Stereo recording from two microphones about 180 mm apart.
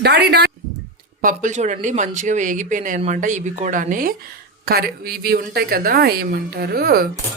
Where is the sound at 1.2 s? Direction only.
50° right (ahead or behind).